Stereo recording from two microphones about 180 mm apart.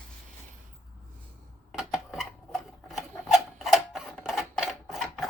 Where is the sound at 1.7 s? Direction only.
Centre (ahead or behind).